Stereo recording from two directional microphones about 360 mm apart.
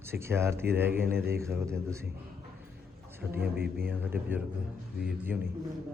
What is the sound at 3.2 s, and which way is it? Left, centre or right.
A man's voice, centre.